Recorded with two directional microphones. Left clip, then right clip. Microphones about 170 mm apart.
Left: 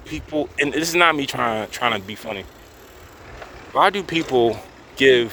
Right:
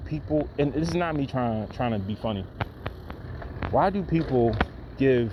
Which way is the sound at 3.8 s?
50° left (ahead or behind).